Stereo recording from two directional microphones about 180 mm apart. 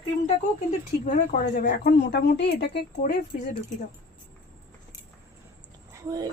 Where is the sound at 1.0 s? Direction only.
50° left (ahead or behind).